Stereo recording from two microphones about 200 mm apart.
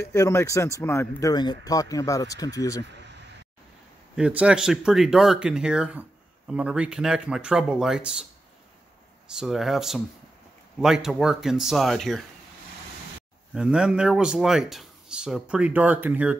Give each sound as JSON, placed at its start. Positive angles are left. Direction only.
{"t": 0.0, "sound": "speech", "side_deg": 15}
{"t": 4.2, "sound": "speech", "side_deg": -5}
{"t": 9.3, "sound": "speech", "side_deg": 0}
{"t": 13.6, "sound": "speech", "side_deg": -5}